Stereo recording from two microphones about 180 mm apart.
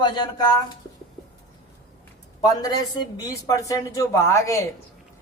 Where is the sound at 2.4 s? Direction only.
20° left (ahead or behind).